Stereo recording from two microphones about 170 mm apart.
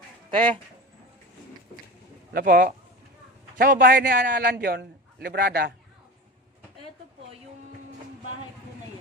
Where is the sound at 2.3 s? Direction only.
55° right (ahead or behind).